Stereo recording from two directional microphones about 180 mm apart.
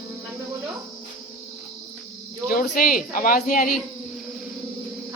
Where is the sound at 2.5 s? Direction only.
55° left (ahead or behind).